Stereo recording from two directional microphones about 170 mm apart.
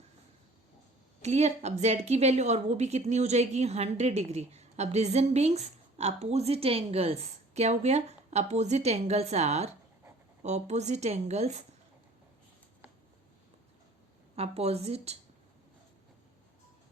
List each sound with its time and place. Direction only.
1.2 s a woman's voice: 40° right (ahead or behind)
14.3 s a woman's voice: 40° right (ahead or behind)